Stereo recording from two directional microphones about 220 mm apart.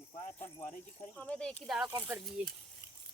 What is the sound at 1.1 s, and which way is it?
Speech, 5° left (ahead or behind).